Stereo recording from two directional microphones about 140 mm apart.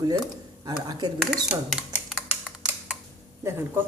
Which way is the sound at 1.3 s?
Centre (ahead or behind).